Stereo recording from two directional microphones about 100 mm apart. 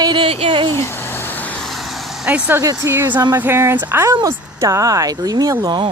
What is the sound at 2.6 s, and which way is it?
Speech, 35° right (ahead or behind).